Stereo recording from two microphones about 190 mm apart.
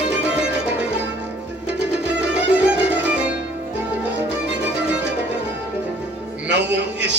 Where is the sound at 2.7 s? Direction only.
10° right (ahead or behind).